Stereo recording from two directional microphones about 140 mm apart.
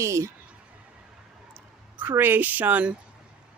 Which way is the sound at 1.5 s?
15° right (ahead or behind).